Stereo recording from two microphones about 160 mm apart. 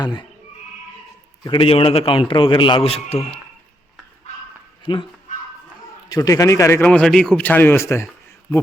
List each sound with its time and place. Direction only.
0.0 s speech: 25° left (ahead or behind)
1.5 s a man's voice: 35° left (ahead or behind)
4.9 s a man's voice: 30° left (ahead or behind)
6.1 s a man's voice: 20° left (ahead or behind)